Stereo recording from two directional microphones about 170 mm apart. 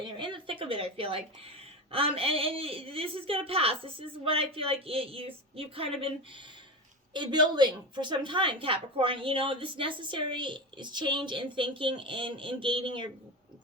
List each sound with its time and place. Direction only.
0.0 s a woman's voice: 30° right (ahead or behind)